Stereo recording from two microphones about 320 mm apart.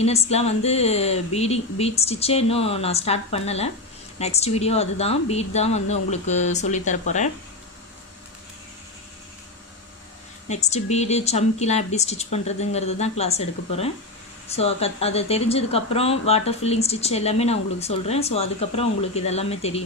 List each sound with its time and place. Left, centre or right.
0.0 s speech: centre
10.5 s speech: left